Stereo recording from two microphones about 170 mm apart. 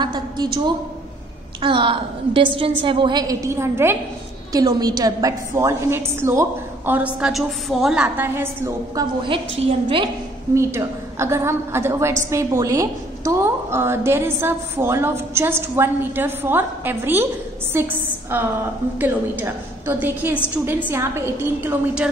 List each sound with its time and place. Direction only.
0.0 s a woman's voice: 25° right (ahead or behind)
7.2 s a woman's voice: 5° right (ahead or behind); by 10.0 s 30° right (ahead or behind)
10.5 s a woman's voice: 15° right (ahead or behind)